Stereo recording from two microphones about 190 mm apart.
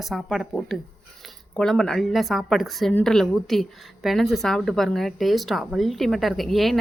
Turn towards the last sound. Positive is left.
turn(degrees=0)  # may be behind; listen again after turning